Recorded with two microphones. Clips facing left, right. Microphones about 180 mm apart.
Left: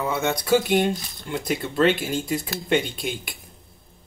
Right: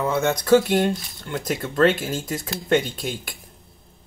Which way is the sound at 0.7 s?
15° left (ahead or behind).